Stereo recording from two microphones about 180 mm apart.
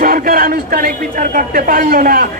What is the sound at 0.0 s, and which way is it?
Speech, 50° right (ahead or behind).